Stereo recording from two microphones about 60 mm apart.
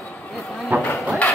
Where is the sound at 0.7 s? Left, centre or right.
Right.